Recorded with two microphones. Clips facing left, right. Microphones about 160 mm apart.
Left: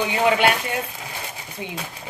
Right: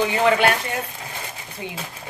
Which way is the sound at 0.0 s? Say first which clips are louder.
Right 1 dB; 15° left (ahead or behind).